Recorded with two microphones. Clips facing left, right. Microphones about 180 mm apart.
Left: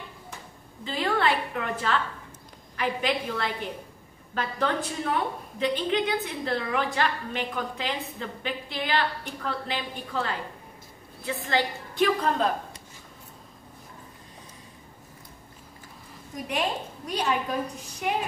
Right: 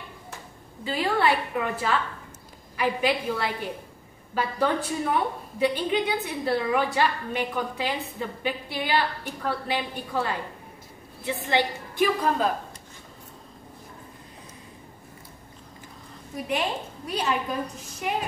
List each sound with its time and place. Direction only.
0.8 s a woman's voice: 10° right (ahead or behind)
12.0 s a woman's voice: 5° right (ahead or behind)
16.4 s a woman's voice: 5° right (ahead or behind)